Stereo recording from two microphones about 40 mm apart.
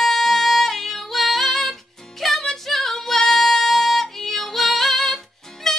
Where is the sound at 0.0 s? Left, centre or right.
Centre.